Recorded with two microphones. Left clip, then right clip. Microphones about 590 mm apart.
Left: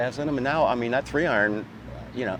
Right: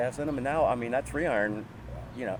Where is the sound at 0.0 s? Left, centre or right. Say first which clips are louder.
Left 4 dB; left.